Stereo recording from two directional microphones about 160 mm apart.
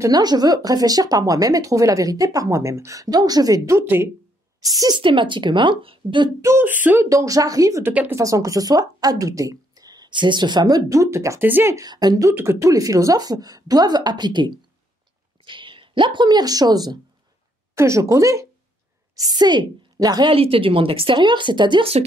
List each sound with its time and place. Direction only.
0.0 s speech: 25° right (ahead or behind)
6.4 s speech: 15° right (ahead or behind); by 22.0 s 35° right (ahead or behind)